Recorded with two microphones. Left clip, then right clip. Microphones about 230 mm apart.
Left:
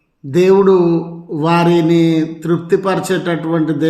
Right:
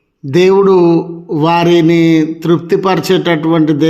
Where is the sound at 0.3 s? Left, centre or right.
Right.